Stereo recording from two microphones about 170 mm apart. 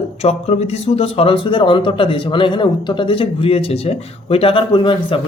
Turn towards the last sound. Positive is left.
turn(degrees=30)  # may be behind; listen again after turning